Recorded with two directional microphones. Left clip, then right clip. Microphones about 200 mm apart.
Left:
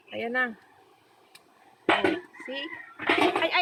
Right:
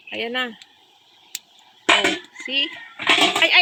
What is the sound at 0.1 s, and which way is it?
Speech, 35° right (ahead or behind).